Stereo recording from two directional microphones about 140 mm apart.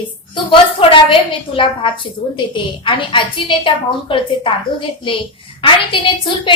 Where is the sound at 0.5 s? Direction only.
35° left (ahead or behind).